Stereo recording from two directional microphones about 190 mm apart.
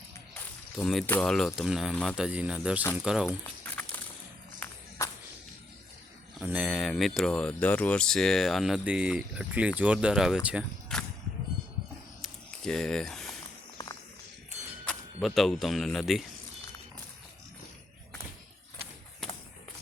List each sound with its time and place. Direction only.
0.3 s speech: 5° left (ahead or behind)
4.6 s music: 10° left (ahead or behind)
6.4 s speech: 5° right (ahead or behind)
12.2 s a sound: 5° left (ahead or behind)
13.8 s a sound: 20° left (ahead or behind)
14.8 s speech: centre (ahead or behind)